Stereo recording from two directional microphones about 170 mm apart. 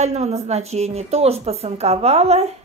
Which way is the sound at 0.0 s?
40° right (ahead or behind).